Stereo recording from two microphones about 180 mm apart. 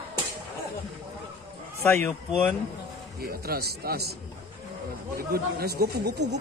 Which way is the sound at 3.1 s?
60° right (ahead or behind).